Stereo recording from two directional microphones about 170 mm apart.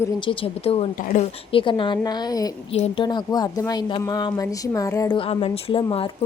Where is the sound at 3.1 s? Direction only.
25° left (ahead or behind).